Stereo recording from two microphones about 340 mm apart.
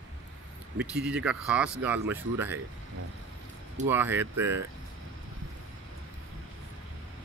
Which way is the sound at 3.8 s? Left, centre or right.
Centre.